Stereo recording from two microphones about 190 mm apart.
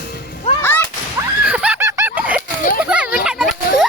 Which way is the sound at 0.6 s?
10° left (ahead or behind).